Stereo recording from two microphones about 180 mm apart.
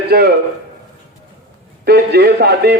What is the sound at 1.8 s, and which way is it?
Speech, 65° right (ahead or behind).